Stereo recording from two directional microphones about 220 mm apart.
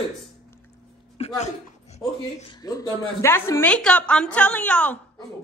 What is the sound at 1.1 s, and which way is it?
Speech, 25° left (ahead or behind).